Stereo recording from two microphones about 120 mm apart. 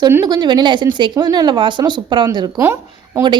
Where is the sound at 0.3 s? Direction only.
35° right (ahead or behind).